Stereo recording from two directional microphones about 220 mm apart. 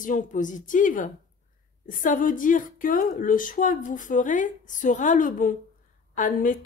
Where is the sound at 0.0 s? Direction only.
35° left (ahead or behind).